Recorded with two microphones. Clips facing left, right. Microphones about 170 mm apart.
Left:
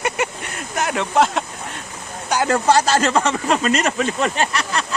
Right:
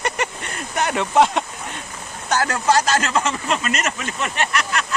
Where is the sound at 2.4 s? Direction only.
30° left (ahead or behind).